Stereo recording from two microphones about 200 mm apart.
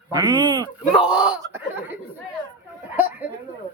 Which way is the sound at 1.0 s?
5° right (ahead or behind).